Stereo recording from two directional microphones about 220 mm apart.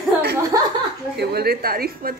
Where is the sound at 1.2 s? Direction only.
45° right (ahead or behind).